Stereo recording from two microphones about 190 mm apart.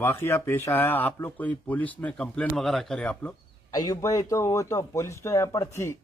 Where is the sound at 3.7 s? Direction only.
20° left (ahead or behind).